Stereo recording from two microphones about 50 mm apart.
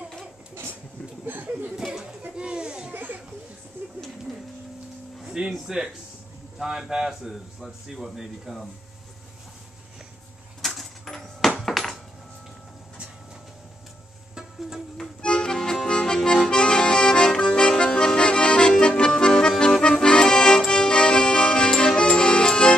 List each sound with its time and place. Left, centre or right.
1.2 s chuckle: right
2.3 s children playing: centre
2.9 s a sound: right
5.2 s music: centre
5.7 s a man's voice: centre
10.6 s a sound: centre
15.0 s accordion: centre
22.1 s music: centre